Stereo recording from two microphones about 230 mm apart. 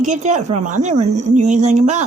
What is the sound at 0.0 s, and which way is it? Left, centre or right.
Speech, right.